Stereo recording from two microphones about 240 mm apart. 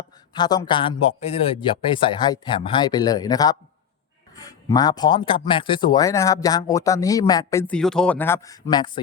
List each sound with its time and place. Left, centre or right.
0.3 s a man's voice: centre